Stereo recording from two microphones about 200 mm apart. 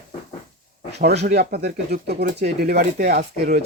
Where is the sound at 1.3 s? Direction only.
50° right (ahead or behind).